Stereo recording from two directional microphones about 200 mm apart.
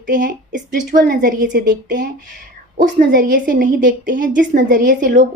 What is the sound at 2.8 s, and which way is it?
A woman's voice, 45° right (ahead or behind).